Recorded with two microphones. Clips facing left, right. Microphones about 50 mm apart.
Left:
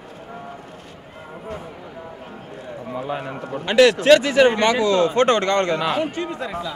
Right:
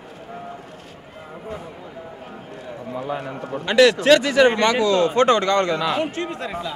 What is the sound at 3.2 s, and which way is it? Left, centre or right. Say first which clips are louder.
Speech: even; centre.